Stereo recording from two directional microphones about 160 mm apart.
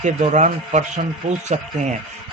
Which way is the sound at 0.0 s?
50° right (ahead or behind).